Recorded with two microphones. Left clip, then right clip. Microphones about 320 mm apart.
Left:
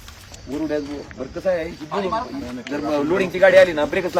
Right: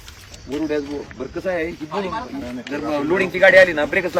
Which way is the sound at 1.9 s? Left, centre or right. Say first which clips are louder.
Left 2 dB; centre.